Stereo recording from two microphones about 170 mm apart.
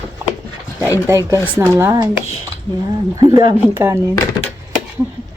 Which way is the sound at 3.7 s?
15° right (ahead or behind).